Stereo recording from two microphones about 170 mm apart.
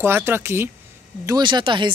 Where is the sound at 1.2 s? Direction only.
25° right (ahead or behind).